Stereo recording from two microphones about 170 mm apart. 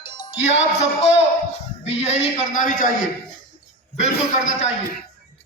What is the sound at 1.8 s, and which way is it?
A man's voice, 40° left (ahead or behind).